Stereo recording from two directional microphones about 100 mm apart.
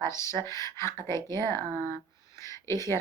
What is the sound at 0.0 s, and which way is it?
Speech, 30° left (ahead or behind).